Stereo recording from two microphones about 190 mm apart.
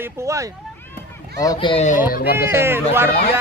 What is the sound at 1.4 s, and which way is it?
Speech, 20° left (ahead or behind).